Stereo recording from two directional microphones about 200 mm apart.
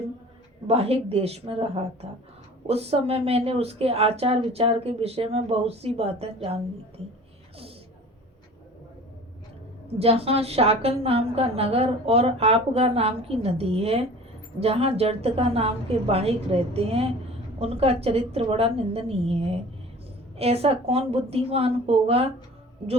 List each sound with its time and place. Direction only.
0.7 s a woman's voice: 30° right (ahead or behind)
9.8 s a woman's voice: 30° right (ahead or behind)